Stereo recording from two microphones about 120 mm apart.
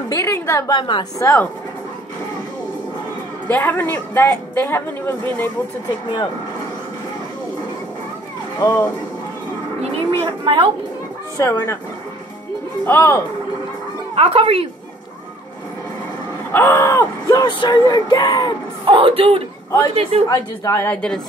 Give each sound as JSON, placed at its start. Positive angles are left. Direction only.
{"t": 0.1, "sound": "a woman's voice", "side_deg": 20}
{"t": 0.7, "sound": "a sound", "side_deg": 40}
{"t": 1.2, "sound": "a woman's voice", "side_deg": 15}
{"t": 3.4, "sound": "a woman's voice", "side_deg": 15}
{"t": 8.6, "sound": "a woman's voice", "side_deg": 15}
{"t": 10.2, "sound": "speech", "side_deg": -45}
{"t": 11.3, "sound": "a woman's voice", "side_deg": 25}
{"t": 12.8, "sound": "a woman's voice", "side_deg": 20}
{"t": 14.1, "sound": "speech", "side_deg": -55}
{"t": 16.5, "sound": "a sound", "side_deg": 20}
{"t": 17.4, "sound": "a sound", "side_deg": 40}
{"t": 18.9, "sound": "a woman's voice", "side_deg": -50}
{"t": 20.2, "sound": "a woman's voice", "side_deg": 30}
{"t": 20.8, "sound": "a woman's voice", "side_deg": 10}